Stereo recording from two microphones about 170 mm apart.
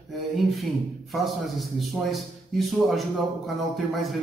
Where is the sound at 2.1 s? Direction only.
Centre (ahead or behind).